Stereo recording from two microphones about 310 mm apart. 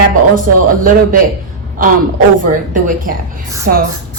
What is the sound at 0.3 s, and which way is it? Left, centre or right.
A woman's voice, right.